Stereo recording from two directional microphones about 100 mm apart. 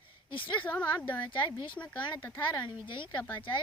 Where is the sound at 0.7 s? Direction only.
20° left (ahead or behind).